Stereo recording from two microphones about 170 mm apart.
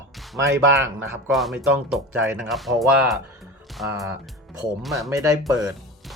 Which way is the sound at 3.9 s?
20° right (ahead or behind).